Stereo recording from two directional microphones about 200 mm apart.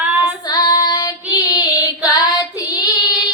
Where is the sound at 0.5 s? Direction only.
20° left (ahead or behind).